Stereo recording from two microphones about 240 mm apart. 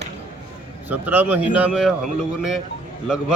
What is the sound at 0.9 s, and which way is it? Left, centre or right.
A man's voice, centre.